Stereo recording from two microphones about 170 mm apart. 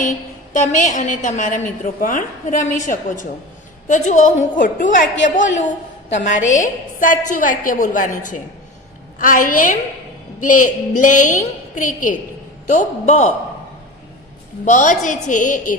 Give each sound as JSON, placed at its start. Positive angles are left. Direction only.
{"t": 0.0, "sound": "a woman's voice", "side_deg": 50}
{"t": 14.6, "sound": "a woman's voice", "side_deg": 50}